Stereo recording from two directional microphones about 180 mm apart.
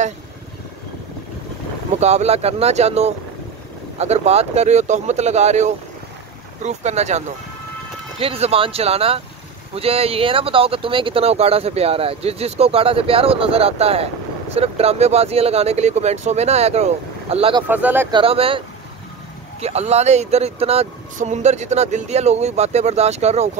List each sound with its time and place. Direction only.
2.0 s speech: 35° right (ahead or behind)
17.6 s speech: 10° right (ahead or behind)
18.1 s speech: 30° right (ahead or behind)
19.6 s speech: 35° right (ahead or behind)